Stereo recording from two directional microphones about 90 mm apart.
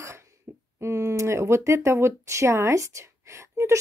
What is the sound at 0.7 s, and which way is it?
Speech, 30° right (ahead or behind).